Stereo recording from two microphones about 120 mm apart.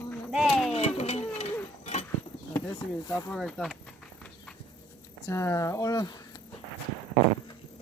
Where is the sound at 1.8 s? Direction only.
70° left (ahead or behind).